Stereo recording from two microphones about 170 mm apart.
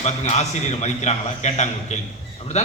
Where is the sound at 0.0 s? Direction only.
40° left (ahead or behind).